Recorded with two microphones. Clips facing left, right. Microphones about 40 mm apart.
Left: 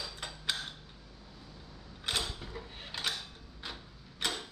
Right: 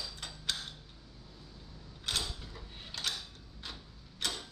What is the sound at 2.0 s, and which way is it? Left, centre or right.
Mechanisms, left.